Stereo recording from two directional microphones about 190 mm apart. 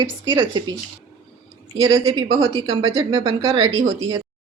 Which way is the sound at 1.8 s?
20° right (ahead or behind).